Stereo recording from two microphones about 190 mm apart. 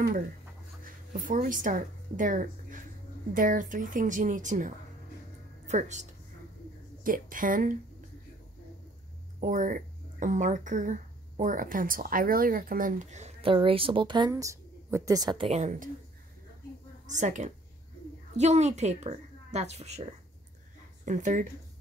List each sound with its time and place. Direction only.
0.8 s a woman's voice: 45° right (ahead or behind)
9.4 s speech: 45° right (ahead or behind); by 15.6 s 25° right (ahead or behind)
15.6 s a woman's voice: 45° right (ahead or behind)
17.0 s a woman's voice: 40° right (ahead or behind)
21.0 s speech: 40° right (ahead or behind)